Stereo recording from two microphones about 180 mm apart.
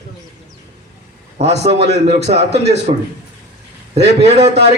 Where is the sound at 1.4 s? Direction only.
35° right (ahead or behind).